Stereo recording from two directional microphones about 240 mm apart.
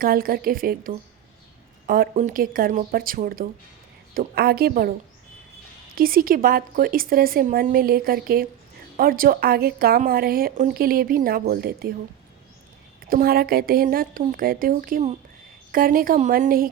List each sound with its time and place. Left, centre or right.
0.0 s speech: right
13.0 s speech: right